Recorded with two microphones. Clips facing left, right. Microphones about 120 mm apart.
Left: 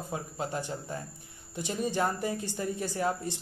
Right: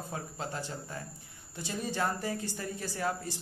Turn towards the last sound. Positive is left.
turn(degrees=20)  # may be behind; listen again after turning